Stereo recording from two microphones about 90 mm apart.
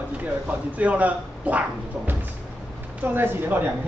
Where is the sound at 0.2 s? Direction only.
15° right (ahead or behind).